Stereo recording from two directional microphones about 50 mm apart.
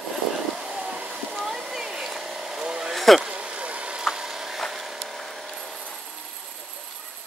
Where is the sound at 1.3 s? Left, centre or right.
Centre.